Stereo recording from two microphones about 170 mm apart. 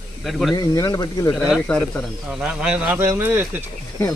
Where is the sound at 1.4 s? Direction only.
5° left (ahead or behind).